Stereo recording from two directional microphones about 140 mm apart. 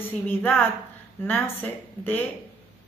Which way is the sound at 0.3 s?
15° left (ahead or behind).